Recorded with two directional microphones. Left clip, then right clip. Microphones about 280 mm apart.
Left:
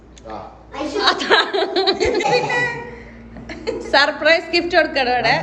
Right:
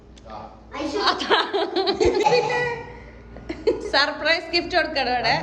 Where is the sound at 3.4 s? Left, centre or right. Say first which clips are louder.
Right 3 dB; right.